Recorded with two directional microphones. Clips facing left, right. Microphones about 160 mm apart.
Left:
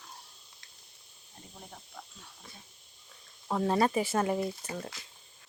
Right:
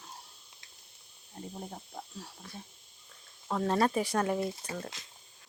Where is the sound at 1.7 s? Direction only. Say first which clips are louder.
Right 6 dB; 35° right (ahead or behind).